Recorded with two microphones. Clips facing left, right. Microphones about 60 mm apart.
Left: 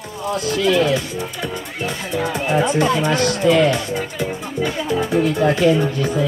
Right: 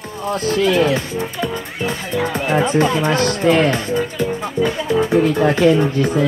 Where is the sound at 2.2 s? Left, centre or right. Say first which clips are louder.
Even; right.